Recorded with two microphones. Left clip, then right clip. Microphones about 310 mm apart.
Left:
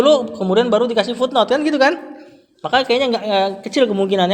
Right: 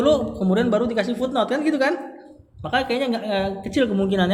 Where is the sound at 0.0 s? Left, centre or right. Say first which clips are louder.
Left 5 dB; centre.